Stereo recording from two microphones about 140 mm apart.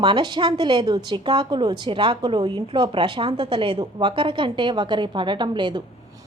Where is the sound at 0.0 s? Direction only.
35° right (ahead or behind).